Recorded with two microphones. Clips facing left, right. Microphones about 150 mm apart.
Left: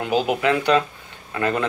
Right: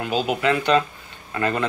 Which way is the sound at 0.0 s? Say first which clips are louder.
Left 2 dB; 20° left (ahead or behind).